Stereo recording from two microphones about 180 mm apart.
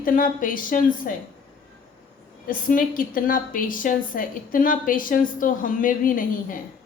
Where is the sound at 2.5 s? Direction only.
50° left (ahead or behind).